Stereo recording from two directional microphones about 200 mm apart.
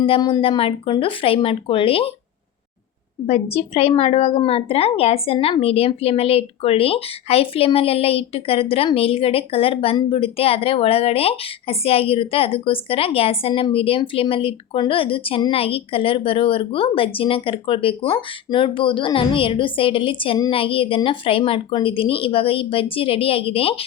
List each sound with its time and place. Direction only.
0.0 s speech: 25° left (ahead or behind)
3.2 s speech: 30° left (ahead or behind)